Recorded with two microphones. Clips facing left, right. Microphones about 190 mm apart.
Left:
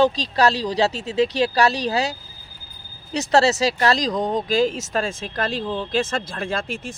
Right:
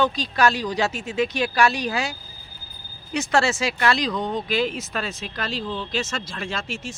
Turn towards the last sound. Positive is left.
turn(degrees=55)  # may be behind; listen again after turning